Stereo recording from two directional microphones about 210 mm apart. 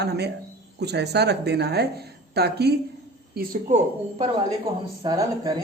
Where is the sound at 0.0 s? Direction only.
50° right (ahead or behind).